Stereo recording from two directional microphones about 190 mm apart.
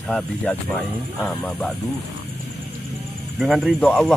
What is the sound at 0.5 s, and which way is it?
Speech, 5° left (ahead or behind).